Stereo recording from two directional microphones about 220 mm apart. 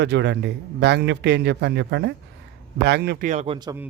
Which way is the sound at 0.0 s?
50° right (ahead or behind).